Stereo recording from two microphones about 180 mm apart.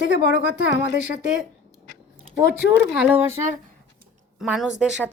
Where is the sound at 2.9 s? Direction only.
5° right (ahead or behind).